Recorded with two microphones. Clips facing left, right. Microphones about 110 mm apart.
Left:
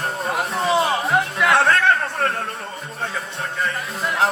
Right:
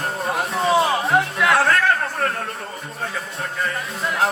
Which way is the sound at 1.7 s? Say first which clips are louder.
Left 1 dB; 30° left (ahead or behind).